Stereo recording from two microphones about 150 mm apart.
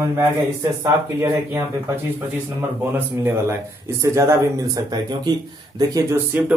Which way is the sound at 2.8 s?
15° right (ahead or behind).